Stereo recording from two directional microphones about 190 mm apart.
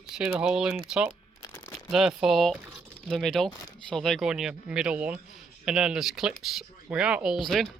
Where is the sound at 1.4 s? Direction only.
20° left (ahead or behind).